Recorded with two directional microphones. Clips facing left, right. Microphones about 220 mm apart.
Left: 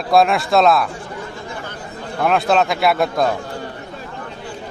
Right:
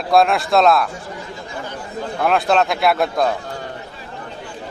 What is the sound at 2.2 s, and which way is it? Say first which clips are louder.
A man's voice: left 1 dB; centre (ahead or behind).